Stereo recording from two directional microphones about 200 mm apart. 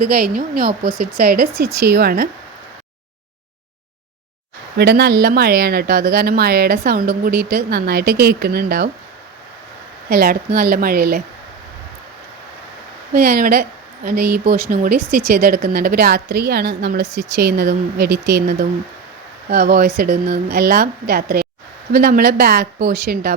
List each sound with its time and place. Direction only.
0.0 s speech: 45° right (ahead or behind)
4.8 s speech: 55° right (ahead or behind)
10.1 s speech: 50° right (ahead or behind)
13.1 s speech: 50° right (ahead or behind)